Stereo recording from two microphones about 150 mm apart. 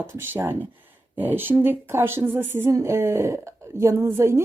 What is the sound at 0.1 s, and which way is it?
A woman's voice, 15° right (ahead or behind).